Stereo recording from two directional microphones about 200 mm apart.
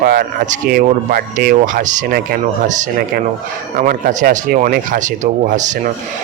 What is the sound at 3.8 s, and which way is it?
Speech, 45° right (ahead or behind).